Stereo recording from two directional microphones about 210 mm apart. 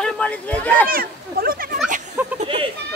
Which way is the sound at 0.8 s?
45° right (ahead or behind).